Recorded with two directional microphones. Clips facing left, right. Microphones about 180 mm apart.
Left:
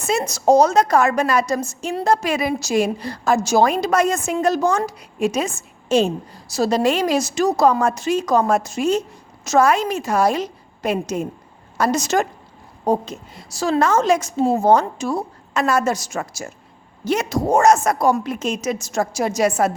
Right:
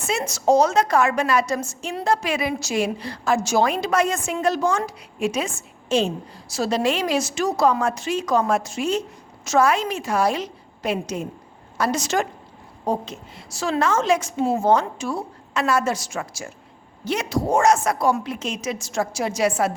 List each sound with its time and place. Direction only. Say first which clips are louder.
0.0 s a woman's voice: left 3 dB; 40° left (ahead or behind)